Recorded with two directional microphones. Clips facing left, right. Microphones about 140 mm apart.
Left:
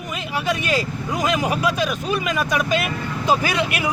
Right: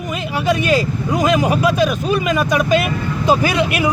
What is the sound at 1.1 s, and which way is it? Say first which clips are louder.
Speech: right 6 dB; 25° right (ahead or behind).